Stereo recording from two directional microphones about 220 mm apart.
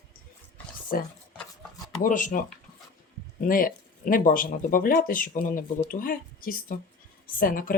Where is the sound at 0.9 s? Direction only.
40° left (ahead or behind).